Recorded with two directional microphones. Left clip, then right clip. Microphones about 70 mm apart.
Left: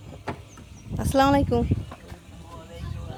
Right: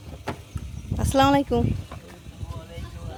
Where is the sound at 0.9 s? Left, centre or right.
Centre.